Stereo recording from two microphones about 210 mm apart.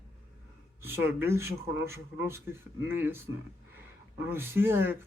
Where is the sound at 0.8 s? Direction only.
10° right (ahead or behind).